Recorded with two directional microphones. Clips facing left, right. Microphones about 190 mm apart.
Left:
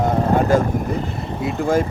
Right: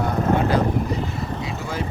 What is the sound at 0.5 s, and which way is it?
Speech, 45° left (ahead or behind).